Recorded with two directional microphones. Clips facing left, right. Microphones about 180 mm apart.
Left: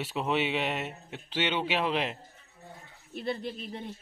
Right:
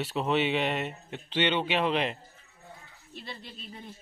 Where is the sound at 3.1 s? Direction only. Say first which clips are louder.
Left 10 dB; 55° left (ahead or behind).